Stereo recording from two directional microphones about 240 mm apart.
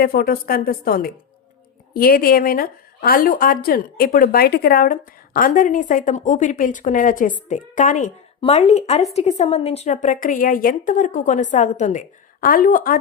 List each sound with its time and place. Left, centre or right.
0.0 s speech: left